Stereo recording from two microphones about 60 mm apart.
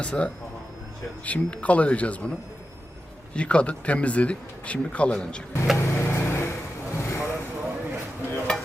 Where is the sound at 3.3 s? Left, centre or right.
Centre.